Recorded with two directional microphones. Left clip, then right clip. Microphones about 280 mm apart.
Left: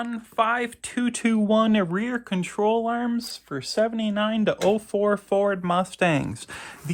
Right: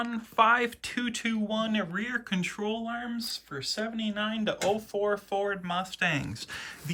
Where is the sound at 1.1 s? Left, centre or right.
Centre.